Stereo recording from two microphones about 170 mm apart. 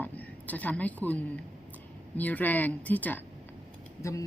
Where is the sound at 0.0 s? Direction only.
10° left (ahead or behind).